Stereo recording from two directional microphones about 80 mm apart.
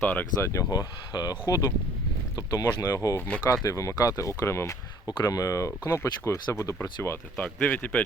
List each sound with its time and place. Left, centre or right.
0.0 s speech: left
0.4 s speech: left
0.7 s speech: left
3.2 s speech: centre
3.6 s speech: left
5.0 s speech: left
7.0 s speech: left
7.3 s speech: centre